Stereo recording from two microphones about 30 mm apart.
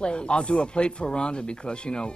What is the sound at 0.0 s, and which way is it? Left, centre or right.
Speech, left.